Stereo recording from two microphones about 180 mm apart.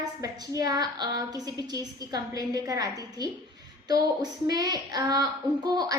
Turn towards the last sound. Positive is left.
turn(degrees=-20)  # may be behind; listen again after turning